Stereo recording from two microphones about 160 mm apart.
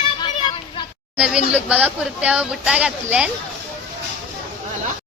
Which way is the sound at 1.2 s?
5° right (ahead or behind).